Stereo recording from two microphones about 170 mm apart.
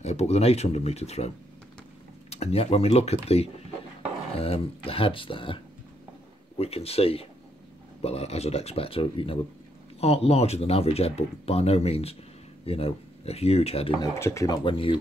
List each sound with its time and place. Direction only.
0.0 s speech: 40° left (ahead or behind)
6.6 s speech: 35° left (ahead or behind)
14.0 s speech: 15° left (ahead or behind)
14.6 s speech: 30° left (ahead or behind)